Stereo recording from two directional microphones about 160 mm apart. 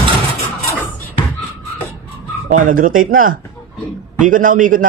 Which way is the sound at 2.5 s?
55° right (ahead or behind).